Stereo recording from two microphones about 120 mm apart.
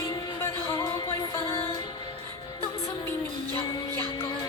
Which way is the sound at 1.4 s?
50° left (ahead or behind).